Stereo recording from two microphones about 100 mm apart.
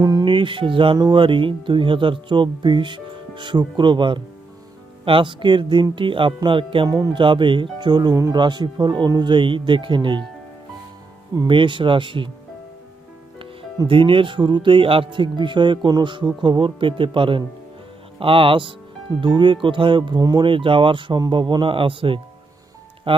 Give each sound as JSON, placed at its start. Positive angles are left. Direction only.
{"t": 0.0, "sound": "music", "side_deg": -45}
{"t": 0.3, "sound": "music", "side_deg": -55}
{"t": 0.9, "sound": "speech", "side_deg": -50}
{"t": 6.8, "sound": "speech", "side_deg": -40}
{"t": 7.2, "sound": "speech", "side_deg": -55}
{"t": 8.1, "sound": "speech", "side_deg": -30}
{"t": 8.4, "sound": "speech", "side_deg": -50}
{"t": 11.4, "sound": "speech", "side_deg": -55}
{"t": 13.8, "sound": "speech", "side_deg": -60}